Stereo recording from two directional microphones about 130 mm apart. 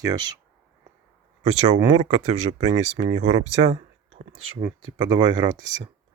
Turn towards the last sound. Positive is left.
turn(degrees=-35)  # may be behind; listen again after turning